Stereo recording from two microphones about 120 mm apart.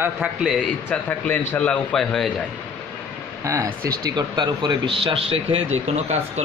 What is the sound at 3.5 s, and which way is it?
Speech, 25° right (ahead or behind).